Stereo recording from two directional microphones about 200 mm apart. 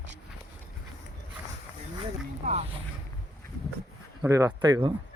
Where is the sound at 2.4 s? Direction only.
35° right (ahead or behind).